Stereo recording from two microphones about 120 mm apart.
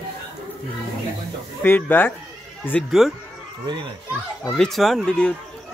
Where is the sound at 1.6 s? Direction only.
15° left (ahead or behind).